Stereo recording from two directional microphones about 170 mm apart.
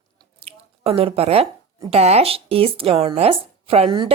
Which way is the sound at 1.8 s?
35° right (ahead or behind).